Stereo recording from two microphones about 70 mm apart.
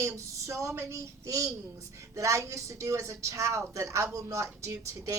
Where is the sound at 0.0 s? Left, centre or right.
Right.